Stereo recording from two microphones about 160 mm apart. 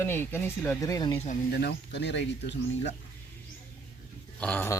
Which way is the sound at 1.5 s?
90° left.